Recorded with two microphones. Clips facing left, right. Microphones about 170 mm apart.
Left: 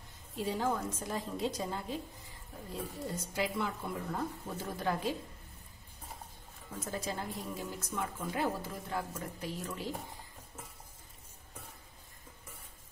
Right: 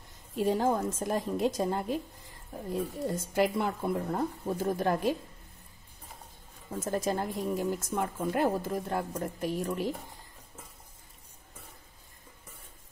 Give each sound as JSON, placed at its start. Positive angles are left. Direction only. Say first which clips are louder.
{"t": 0.4, "sound": "speech", "louder": "right 6 dB", "side_deg": -50}
{"t": 6.8, "sound": "speech", "louder": "right 8 dB", "side_deg": -50}